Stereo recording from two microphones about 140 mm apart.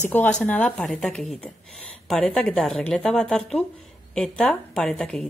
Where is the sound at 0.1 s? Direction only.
10° left (ahead or behind).